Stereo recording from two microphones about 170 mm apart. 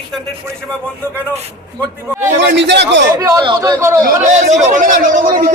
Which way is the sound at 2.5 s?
85° right.